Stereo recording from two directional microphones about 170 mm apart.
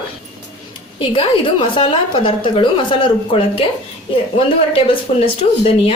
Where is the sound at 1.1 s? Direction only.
30° left (ahead or behind).